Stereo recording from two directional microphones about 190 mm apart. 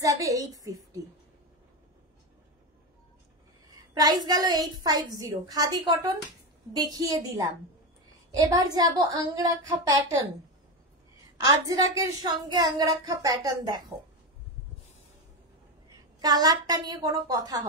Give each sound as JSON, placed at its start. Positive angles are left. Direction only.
{"t": 0.0, "sound": "a woman's voice", "side_deg": -15}
{"t": 3.6, "sound": "a woman's voice", "side_deg": -20}
{"t": 8.8, "sound": "a woman's voice", "side_deg": -20}
{"t": 11.3, "sound": "a woman's voice", "side_deg": -20}
{"t": 16.2, "sound": "a woman's voice", "side_deg": -20}